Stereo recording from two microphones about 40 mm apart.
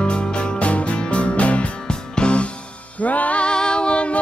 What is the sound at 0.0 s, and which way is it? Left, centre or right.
Music, left.